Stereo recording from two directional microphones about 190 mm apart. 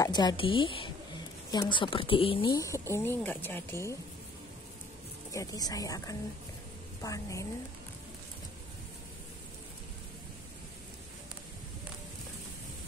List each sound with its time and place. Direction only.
0.0 s a woman's voice: 20° left (ahead or behind)
5.3 s speech: 20° left (ahead or behind)